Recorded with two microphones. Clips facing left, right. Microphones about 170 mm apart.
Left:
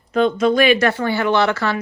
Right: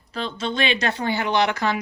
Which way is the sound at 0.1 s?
30° right (ahead or behind).